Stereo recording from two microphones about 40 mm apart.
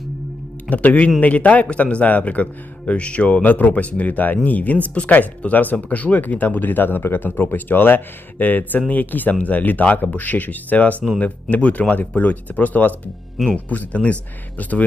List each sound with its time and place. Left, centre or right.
0.7 s a man's voice: left
3.4 s a man's voice: left